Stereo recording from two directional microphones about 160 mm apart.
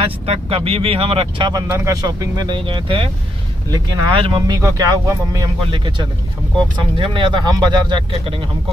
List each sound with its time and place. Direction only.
0.0 s speech: 35° right (ahead or behind)
1.5 s speech: 20° right (ahead or behind)